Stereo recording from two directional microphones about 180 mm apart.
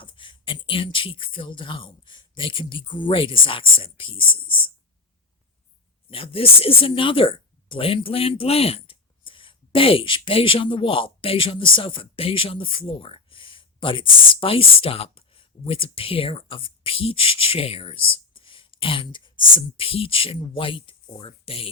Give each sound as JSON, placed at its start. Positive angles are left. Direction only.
{"t": 0.0, "sound": "speech", "side_deg": 25}
{"t": 6.1, "sound": "speech", "side_deg": 30}